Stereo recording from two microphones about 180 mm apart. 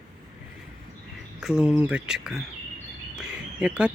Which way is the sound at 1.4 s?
5° right (ahead or behind).